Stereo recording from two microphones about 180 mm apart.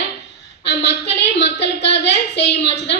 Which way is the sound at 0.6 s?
70° left (ahead or behind).